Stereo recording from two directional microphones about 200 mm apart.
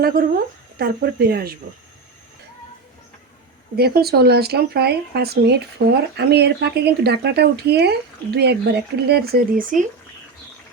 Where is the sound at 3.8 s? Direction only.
50° right (ahead or behind).